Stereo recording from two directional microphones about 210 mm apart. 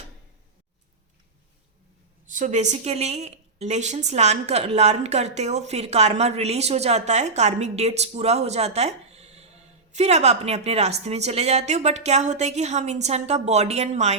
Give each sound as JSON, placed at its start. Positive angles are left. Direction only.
{"t": 2.3, "sound": "speech", "side_deg": -35}